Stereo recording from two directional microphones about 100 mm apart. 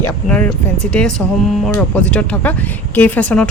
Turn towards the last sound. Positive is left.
turn(degrees=15)  # may be behind; listen again after turning